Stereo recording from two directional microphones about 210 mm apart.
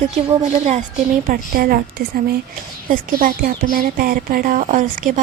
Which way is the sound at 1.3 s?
45° right (ahead or behind).